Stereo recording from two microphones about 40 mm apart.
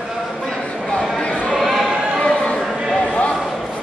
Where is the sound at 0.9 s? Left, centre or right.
Centre.